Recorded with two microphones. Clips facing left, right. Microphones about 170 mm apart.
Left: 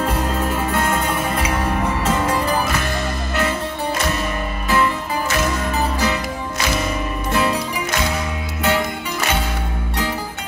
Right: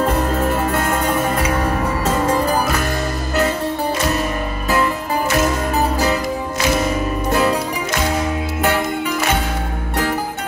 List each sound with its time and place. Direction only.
0.7 s music: 45° right (ahead or behind)
5.8 s music: 40° right (ahead or behind)
7.2 s music: 45° right (ahead or behind)